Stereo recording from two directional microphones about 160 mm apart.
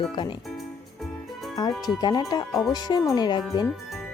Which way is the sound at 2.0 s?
25° left (ahead or behind).